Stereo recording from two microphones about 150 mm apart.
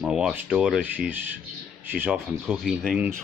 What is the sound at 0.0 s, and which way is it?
Speech, 5° right (ahead or behind).